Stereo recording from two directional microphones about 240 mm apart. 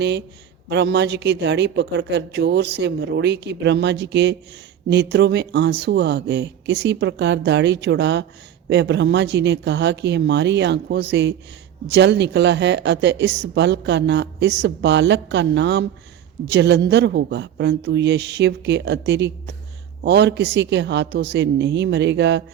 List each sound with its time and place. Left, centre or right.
0.7 s speech: right